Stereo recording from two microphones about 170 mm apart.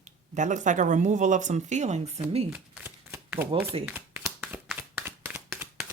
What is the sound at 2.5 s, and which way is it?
Shuffling cards, 10° right (ahead or behind).